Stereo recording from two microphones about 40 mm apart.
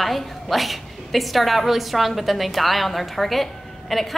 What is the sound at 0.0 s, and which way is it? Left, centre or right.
Speech, centre.